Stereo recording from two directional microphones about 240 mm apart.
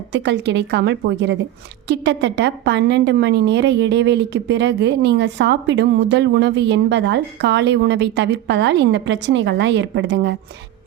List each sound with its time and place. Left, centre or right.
0.1 s a woman's voice: right